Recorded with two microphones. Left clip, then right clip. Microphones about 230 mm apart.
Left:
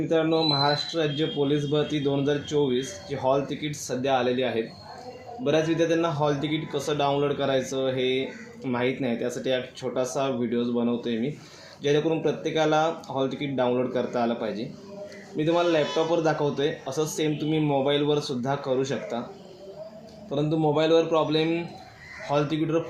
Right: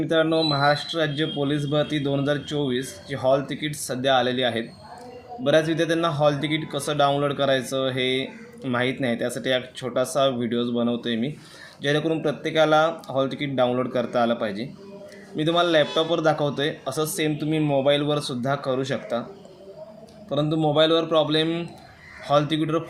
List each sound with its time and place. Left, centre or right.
0.1 s speech: right
5.5 s speech: right
20.3 s speech: right